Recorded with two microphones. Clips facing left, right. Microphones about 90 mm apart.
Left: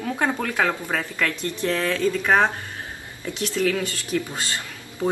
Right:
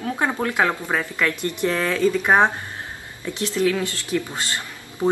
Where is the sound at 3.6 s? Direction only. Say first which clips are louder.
Right 2 dB; 20° right (ahead or behind).